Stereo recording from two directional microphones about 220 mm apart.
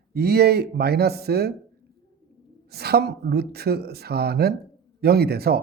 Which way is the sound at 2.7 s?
45° right (ahead or behind).